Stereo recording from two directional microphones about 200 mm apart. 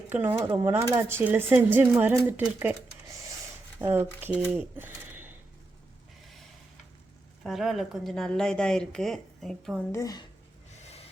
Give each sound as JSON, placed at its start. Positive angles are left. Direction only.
{"t": 0.1, "sound": "speech", "side_deg": -10}
{"t": 7.4, "sound": "a woman's voice", "side_deg": 0}
{"t": 9.9, "sound": "speech", "side_deg": 15}
{"t": 10.8, "sound": "rub", "side_deg": 30}